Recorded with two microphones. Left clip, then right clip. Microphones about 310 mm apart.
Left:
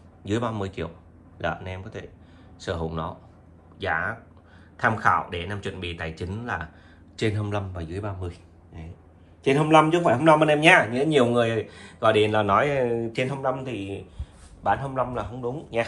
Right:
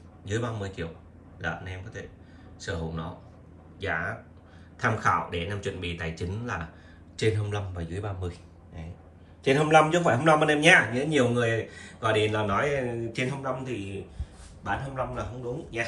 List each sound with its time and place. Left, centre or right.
0.2 s a man's voice: centre